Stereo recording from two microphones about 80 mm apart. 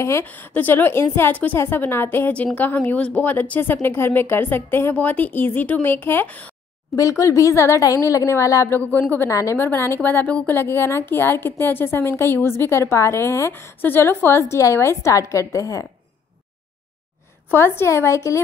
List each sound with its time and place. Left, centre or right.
0.2 s a woman's voice: left
6.9 s a woman's voice: left
8.7 s a woman's voice: left
9.2 s a woman's voice: left
9.6 s a woman's voice: left
17.5 s a woman's voice: left